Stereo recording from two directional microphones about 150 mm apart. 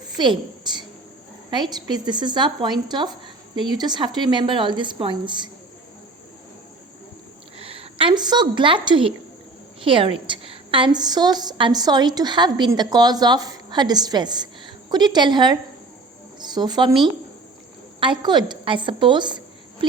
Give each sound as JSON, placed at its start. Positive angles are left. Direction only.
{"t": 0.2, "sound": "a woman's voice", "side_deg": -30}
{"t": 7.6, "sound": "a woman's voice", "side_deg": -40}
{"t": 18.0, "sound": "speech", "side_deg": -30}